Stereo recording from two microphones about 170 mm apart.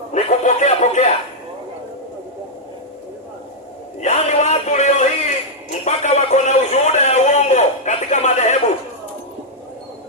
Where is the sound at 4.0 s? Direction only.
45° left (ahead or behind).